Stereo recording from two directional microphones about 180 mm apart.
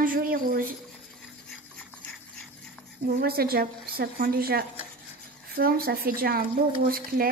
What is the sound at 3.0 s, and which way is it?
A woman's voice, 55° right (ahead or behind).